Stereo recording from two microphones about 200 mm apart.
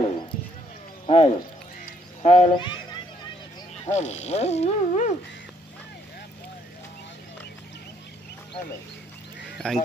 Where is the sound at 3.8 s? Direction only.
35° left (ahead or behind).